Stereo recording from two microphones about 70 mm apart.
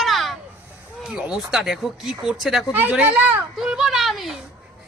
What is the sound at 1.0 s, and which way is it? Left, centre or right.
Speech, centre.